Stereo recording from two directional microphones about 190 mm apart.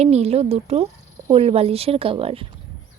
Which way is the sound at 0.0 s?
35° right (ahead or behind).